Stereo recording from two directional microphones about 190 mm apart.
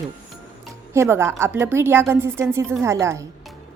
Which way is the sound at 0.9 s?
15° right (ahead or behind).